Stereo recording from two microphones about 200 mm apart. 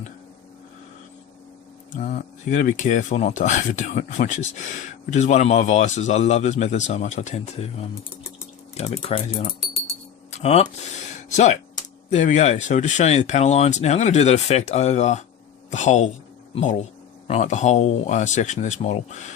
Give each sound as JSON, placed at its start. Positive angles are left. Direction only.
{"t": 2.0, "sound": "speech", "side_deg": 35}